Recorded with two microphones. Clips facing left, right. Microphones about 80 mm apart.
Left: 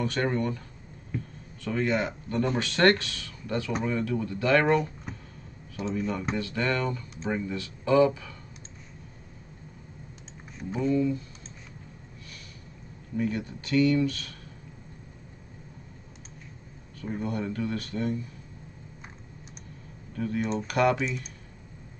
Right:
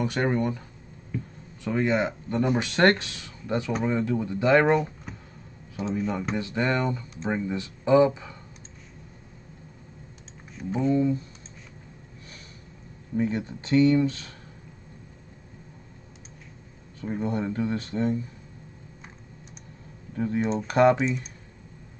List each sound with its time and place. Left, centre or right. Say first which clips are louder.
0.0 s speech: right 2 dB; centre
1.6 s speech: right 3 dB; centre
10.6 s speech: right 3 dB; centre
10.9 s speech: right 2 dB; right
13.1 s speech: right 3 dB; right
17.0 s speech: right 3 dB; right
20.2 s speech: right 3 dB; right